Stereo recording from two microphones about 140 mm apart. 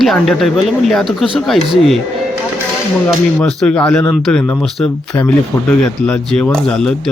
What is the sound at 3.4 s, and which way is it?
Speech, 5° left (ahead or behind).